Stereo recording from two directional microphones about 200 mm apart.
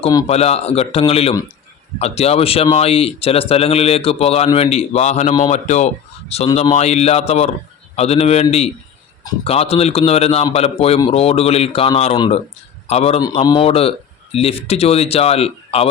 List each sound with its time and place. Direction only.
0.3 s a man's voice: 30° left (ahead or behind)
13.2 s speech: 20° left (ahead or behind)